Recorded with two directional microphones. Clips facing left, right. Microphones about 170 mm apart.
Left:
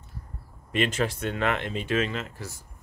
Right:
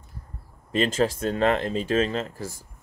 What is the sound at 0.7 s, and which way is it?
Speech, 30° right (ahead or behind).